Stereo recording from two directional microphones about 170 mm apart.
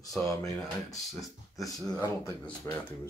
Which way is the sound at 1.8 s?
15° left (ahead or behind).